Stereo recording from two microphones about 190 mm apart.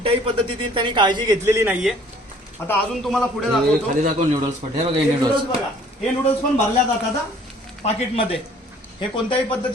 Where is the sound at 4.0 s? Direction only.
40° right (ahead or behind).